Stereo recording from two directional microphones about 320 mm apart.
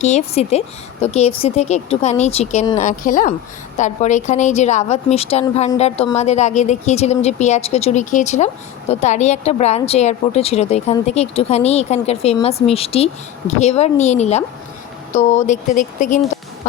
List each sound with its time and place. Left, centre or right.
0.0 s a woman's voice: left